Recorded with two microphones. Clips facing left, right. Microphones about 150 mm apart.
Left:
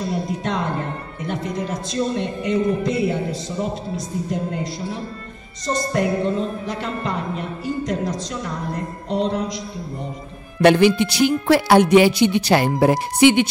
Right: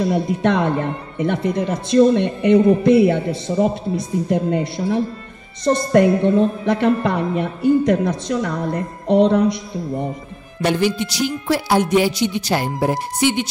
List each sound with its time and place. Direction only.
0.1 s speech: 60° right (ahead or behind)
10.6 s a woman's voice: 65° left (ahead or behind)